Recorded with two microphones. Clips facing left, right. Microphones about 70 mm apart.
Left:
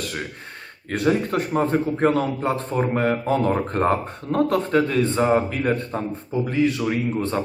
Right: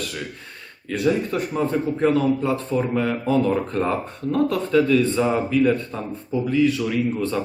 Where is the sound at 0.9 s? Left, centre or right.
Left.